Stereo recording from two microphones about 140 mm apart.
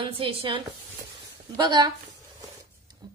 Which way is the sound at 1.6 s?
30° right (ahead or behind).